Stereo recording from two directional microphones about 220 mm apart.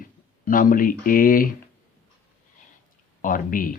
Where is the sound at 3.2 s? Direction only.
40° left (ahead or behind).